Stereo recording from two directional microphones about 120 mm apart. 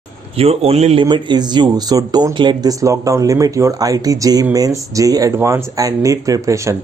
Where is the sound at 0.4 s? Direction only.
55° right (ahead or behind).